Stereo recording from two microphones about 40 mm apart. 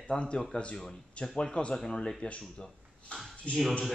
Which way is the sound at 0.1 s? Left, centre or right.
Left.